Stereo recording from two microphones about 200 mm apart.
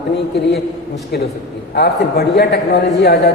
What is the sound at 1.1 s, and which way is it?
A man's voice, 55° left (ahead or behind).